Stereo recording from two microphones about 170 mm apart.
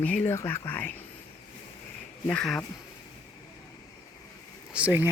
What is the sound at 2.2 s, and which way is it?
Speech, 5° left (ahead or behind).